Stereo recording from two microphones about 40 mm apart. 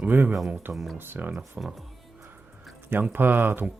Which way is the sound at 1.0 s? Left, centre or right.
Right.